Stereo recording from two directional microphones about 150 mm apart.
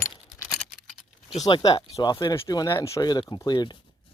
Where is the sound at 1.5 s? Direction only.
35° left (ahead or behind).